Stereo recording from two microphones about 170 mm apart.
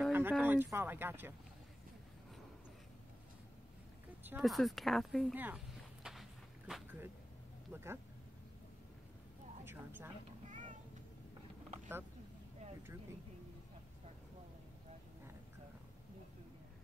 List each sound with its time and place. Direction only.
0.1 s speech: 10° right (ahead or behind)
4.4 s speech: centre (ahead or behind)
6.0 s walk: 5° right (ahead or behind)
6.7 s a sound: 10° right (ahead or behind)
7.7 s speech: 15° right (ahead or behind)
9.7 s a sound: 10° right (ahead or behind)
10.5 s music: 45° right (ahead or behind)